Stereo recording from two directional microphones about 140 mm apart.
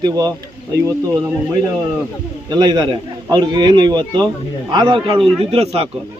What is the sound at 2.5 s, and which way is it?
A man's voice, 30° right (ahead or behind).